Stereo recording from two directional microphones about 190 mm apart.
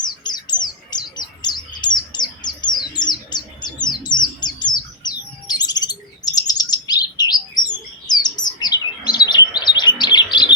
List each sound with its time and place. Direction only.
0.0 s bird: 20° left (ahead or behind)
5.5 s chirp: 20° left (ahead or behind)